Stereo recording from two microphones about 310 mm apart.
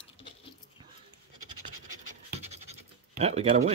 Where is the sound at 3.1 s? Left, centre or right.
Centre.